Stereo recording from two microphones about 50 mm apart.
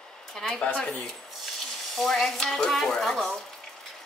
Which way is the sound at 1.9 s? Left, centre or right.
Centre.